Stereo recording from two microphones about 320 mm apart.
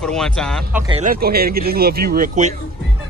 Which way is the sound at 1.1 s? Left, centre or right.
Right.